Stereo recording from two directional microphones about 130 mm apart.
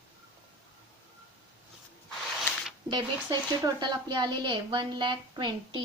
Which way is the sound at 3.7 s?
35° right (ahead or behind).